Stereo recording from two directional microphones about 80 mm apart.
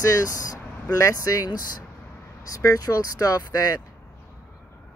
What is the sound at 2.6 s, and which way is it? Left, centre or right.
Speech, left.